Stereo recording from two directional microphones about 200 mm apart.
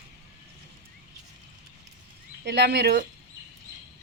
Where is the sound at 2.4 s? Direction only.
60° right (ahead or behind).